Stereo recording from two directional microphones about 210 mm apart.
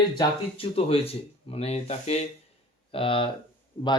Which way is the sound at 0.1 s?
25° left (ahead or behind).